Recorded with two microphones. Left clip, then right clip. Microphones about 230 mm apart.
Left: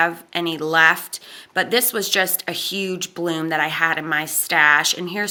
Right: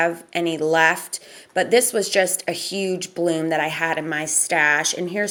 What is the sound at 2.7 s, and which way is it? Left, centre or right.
A woman's voice, centre.